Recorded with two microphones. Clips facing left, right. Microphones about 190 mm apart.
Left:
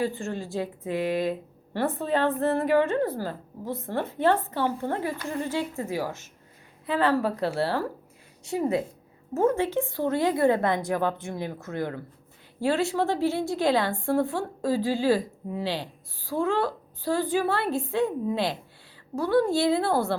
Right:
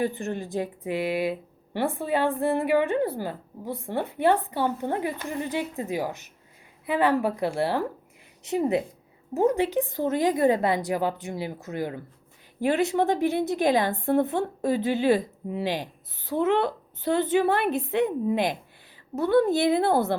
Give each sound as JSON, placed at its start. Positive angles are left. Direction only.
{"t": 0.0, "sound": "a woman's voice", "side_deg": -20}